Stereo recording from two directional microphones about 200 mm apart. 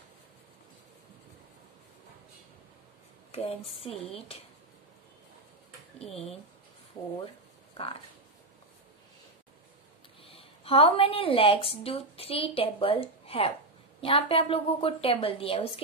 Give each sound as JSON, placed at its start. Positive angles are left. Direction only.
{"t": 3.3, "sound": "a woman's voice", "side_deg": 30}
{"t": 7.0, "sound": "a woman's voice", "side_deg": 30}
{"t": 10.2, "sound": "a woman's voice", "side_deg": 30}